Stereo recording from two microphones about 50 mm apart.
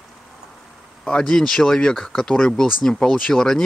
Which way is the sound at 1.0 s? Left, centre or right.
Centre.